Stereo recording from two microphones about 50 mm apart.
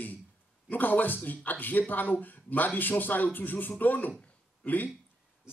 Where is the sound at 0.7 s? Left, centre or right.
Left.